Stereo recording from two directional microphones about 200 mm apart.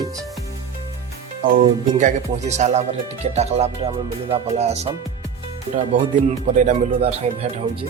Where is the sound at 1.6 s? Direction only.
35° right (ahead or behind).